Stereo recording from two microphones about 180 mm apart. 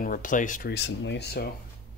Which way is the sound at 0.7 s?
75° left (ahead or behind).